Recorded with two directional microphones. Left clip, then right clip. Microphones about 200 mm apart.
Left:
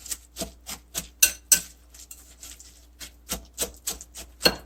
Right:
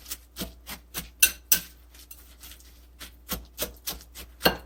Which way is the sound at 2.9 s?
5° left (ahead or behind).